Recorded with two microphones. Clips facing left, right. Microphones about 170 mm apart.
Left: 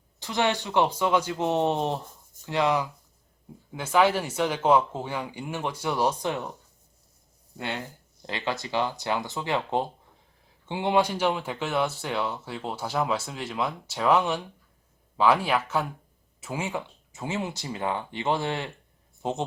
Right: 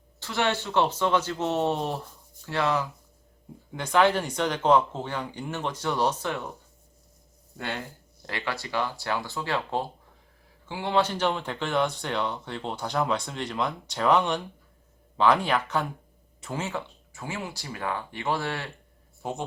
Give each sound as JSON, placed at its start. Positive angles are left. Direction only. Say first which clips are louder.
{"t": 0.2, "sound": "speech", "louder": "left 1 dB", "side_deg": 15}
{"t": 7.5, "sound": "speech", "louder": "left 1 dB", "side_deg": 15}